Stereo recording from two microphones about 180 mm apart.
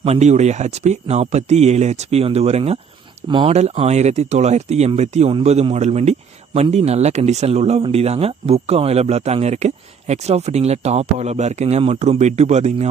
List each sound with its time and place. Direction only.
0.0 s speech: 40° right (ahead or behind)